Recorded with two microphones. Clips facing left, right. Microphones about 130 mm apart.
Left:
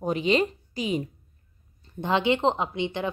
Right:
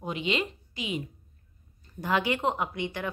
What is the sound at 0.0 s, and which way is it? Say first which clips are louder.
Speech: left 7 dB; 40° left (ahead or behind).